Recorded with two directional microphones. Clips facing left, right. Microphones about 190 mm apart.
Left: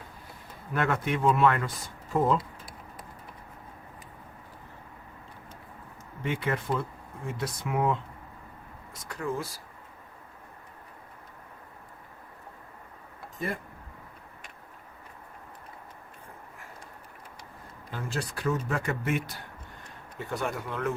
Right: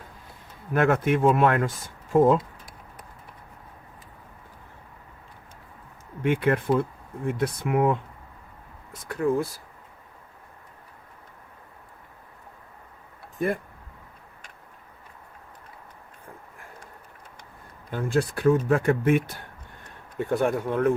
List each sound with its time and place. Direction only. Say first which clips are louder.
0.7 s speech: right 7 dB; 50° right (ahead or behind)
6.2 s speech: right 8 dB; 55° right (ahead or behind)
17.9 s speech: right 9 dB; 55° right (ahead or behind)